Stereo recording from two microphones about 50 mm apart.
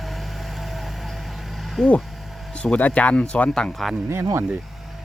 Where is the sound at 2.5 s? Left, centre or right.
Left.